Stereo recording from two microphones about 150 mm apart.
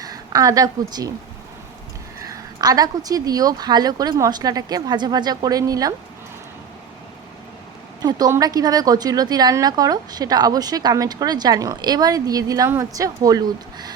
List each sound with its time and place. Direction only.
0.0 s a woman's voice: 25° right (ahead or behind)
2.1 s a woman's voice: 20° right (ahead or behind)
8.0 s a woman's voice: 25° right (ahead or behind)